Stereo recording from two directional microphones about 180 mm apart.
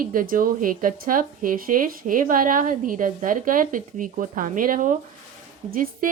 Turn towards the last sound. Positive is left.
turn(degrees=-50)  # may be behind; listen again after turning